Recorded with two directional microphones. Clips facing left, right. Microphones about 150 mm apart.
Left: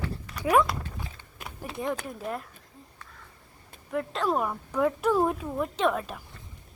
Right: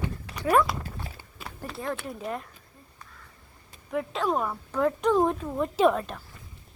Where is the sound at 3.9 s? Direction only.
Centre (ahead or behind).